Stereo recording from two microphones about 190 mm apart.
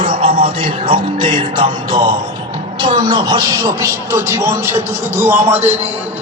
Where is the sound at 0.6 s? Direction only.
30° right (ahead or behind).